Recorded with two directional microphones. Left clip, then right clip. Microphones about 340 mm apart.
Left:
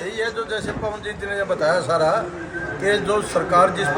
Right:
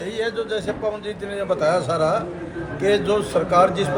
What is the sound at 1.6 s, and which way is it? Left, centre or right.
Speech, centre.